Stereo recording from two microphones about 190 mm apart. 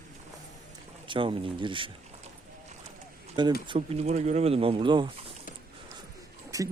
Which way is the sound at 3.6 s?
30° right (ahead or behind).